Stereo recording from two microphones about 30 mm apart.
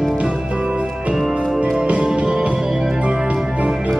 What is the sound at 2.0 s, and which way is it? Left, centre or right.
Music, right.